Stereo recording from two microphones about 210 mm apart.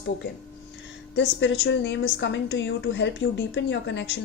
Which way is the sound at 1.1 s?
60° left (ahead or behind).